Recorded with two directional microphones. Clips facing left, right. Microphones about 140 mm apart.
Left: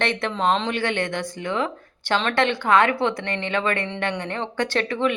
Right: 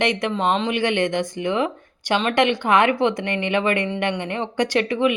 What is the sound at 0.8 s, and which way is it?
Speech, 20° right (ahead or behind).